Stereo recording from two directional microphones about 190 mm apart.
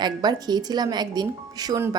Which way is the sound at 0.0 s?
20° right (ahead or behind).